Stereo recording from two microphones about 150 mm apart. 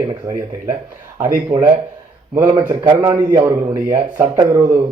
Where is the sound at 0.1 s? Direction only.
20° right (ahead or behind).